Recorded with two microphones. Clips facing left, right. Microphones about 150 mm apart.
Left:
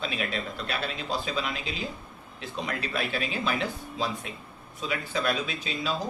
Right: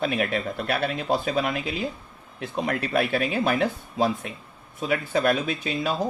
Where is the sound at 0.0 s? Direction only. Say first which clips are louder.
Right 7 dB; 55° right (ahead or behind).